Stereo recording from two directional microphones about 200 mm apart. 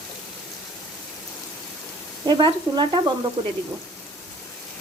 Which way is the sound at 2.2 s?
20° right (ahead or behind).